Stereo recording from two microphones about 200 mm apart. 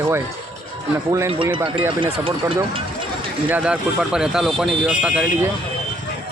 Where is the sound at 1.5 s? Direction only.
25° right (ahead or behind).